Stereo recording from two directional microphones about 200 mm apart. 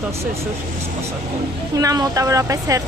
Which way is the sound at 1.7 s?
15° right (ahead or behind).